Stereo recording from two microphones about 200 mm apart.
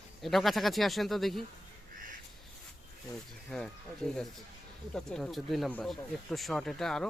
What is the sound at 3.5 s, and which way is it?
Speech, 5° left (ahead or behind).